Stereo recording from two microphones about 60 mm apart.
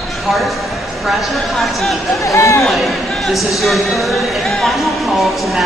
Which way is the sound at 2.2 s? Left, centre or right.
Left.